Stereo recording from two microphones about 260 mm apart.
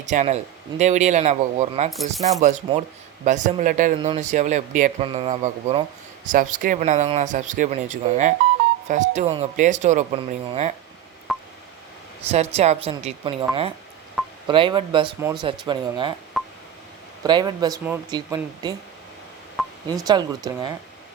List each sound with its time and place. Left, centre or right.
0.1 s speech: right
11.3 s telephone dialing: centre
12.3 s speech: right
16.4 s telephone dialing: centre
17.2 s speech: centre
19.6 s telephone dialing: centre
20.1 s speech: centre